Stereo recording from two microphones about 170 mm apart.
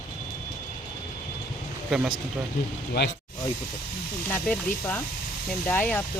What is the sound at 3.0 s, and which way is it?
Speech, 80° left.